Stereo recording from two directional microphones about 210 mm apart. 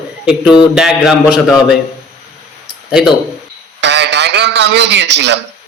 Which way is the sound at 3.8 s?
55° right (ahead or behind).